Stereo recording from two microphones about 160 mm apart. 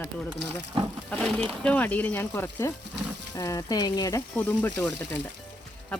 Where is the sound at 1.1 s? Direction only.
5° left (ahead or behind); by 4.2 s 25° left (ahead or behind).